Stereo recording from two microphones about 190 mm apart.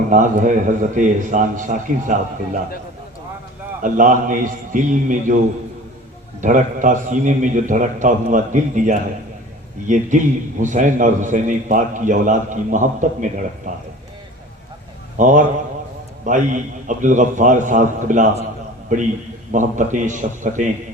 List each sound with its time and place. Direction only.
0.1 s a man's voice: 40° right (ahead or behind)
3.8 s a man's voice: 45° right (ahead or behind)
6.4 s a man's voice: 45° right (ahead or behind)
15.2 s a man's voice: 40° right (ahead or behind)
19.5 s a man's voice: 40° right (ahead or behind)